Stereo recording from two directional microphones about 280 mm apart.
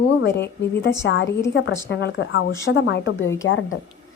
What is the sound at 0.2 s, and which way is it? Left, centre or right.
A woman's voice, left.